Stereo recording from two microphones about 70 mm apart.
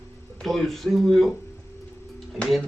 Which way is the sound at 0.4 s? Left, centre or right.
Centre.